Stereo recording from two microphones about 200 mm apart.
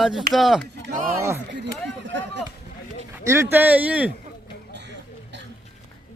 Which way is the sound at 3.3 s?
10° right (ahead or behind).